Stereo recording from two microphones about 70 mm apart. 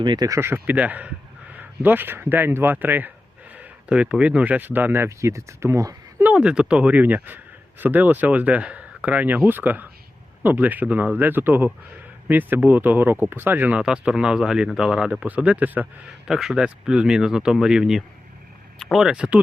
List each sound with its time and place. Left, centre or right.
0.0 s speech: right
0.3 s speech: right
0.5 s speech: right
5.0 s speech: right
6.2 s speech: centre
13.8 s speech: centre
16.2 s speech: centre
19.0 s speech: centre